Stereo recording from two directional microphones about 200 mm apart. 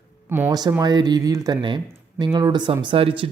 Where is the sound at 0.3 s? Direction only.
10° right (ahead or behind).